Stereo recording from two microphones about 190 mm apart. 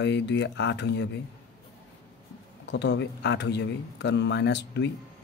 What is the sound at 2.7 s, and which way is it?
Speech, 70° left (ahead or behind).